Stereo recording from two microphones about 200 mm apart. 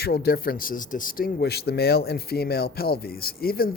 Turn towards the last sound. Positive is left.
turn(degrees=50)  # may be behind; listen again after turning